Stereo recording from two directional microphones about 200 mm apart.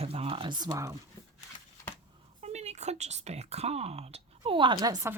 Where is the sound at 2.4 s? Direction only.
35° right (ahead or behind); by 5.1 s 15° right (ahead or behind).